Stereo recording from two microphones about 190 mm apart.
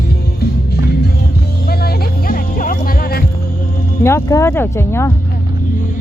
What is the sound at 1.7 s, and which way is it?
Music, 55° left (ahead or behind).